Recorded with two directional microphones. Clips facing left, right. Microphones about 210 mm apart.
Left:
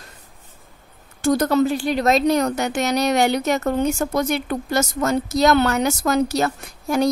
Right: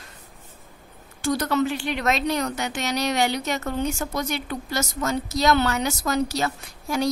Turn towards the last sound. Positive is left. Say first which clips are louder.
# left 5 dB
turn(degrees=50)  # may be behind; listen again after turning